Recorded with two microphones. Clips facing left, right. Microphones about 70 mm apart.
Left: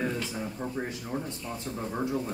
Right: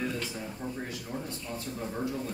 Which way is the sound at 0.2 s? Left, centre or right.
Left.